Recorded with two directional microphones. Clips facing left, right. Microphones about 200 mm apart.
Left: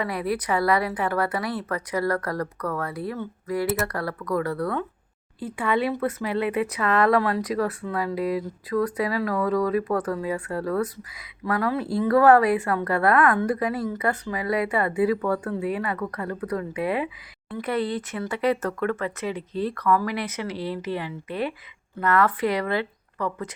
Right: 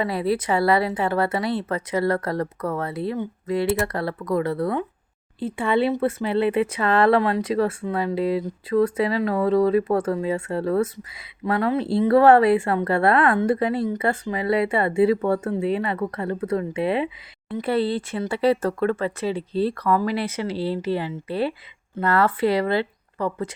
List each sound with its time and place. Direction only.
0.0 s speech: 25° right (ahead or behind)